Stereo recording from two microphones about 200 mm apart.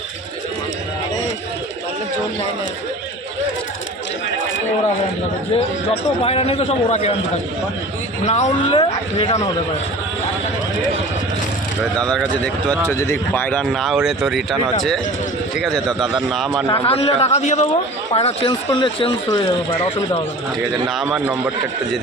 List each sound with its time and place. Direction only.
6.2 s speech: 30° left (ahead or behind)
8.3 s speech: 30° left (ahead or behind)
11.9 s speech: 5° left (ahead or behind)
16.8 s a man's voice: 30° left (ahead or behind)
20.8 s speech: 5° right (ahead or behind)